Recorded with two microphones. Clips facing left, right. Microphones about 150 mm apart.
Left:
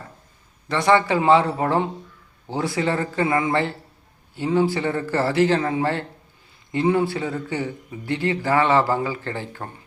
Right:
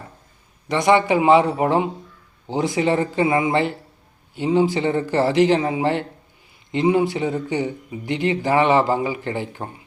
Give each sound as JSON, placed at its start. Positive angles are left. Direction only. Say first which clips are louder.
{"t": 0.7, "sound": "speech", "louder": "right 2 dB", "side_deg": -15}